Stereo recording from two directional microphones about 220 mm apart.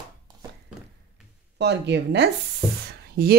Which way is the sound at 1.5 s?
50° right (ahead or behind).